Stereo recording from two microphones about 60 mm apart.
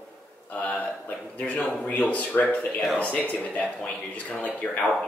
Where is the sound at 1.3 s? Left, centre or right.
Left.